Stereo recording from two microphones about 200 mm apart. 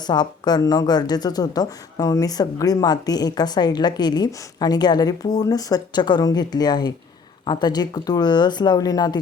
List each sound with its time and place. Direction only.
0.0 s speech: 20° left (ahead or behind)